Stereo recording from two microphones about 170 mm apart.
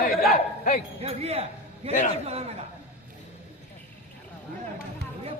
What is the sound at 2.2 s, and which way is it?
Speech, 35° right (ahead or behind).